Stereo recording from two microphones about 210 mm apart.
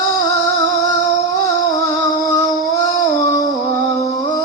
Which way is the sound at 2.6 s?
15° left (ahead or behind).